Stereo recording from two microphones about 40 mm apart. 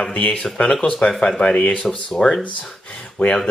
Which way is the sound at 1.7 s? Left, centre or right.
Centre.